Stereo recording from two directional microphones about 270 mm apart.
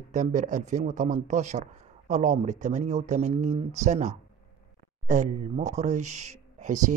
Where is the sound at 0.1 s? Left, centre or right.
Right.